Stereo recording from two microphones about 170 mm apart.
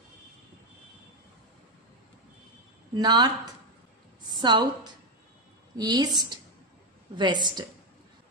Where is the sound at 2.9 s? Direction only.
25° right (ahead or behind).